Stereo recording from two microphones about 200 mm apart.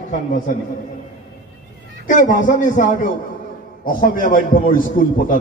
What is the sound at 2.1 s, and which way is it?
A man's voice, 40° left (ahead or behind).